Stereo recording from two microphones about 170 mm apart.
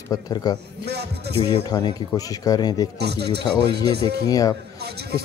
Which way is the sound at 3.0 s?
75° right (ahead or behind).